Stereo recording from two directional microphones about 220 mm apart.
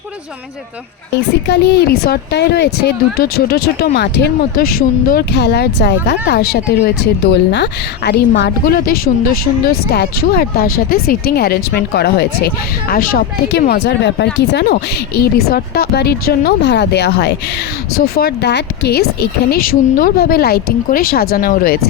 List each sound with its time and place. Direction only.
1.5 s speech: 50° left (ahead or behind)